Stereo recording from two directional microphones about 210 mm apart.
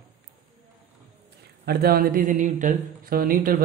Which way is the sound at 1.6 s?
50° right (ahead or behind).